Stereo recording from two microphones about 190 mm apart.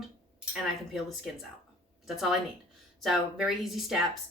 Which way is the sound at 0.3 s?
Centre (ahead or behind).